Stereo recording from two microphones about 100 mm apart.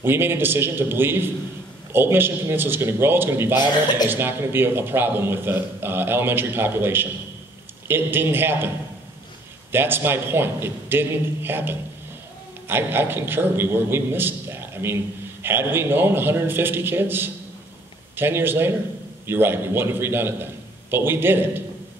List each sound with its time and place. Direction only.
0.0 s a man's voice: 25° right (ahead or behind)